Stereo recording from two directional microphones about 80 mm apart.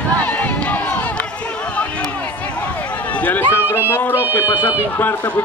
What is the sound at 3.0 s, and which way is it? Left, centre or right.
Run, centre.